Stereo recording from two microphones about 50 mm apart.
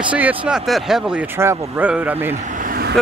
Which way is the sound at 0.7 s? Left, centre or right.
Centre.